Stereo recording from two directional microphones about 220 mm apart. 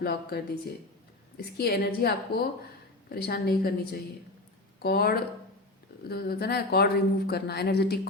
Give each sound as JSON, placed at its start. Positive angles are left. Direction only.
{"t": 0.0, "sound": "speech", "side_deg": 45}
{"t": 1.5, "sound": "speech", "side_deg": 45}